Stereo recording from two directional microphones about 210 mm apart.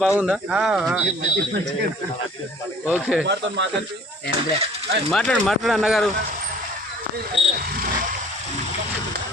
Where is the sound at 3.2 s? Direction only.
55° right (ahead or behind).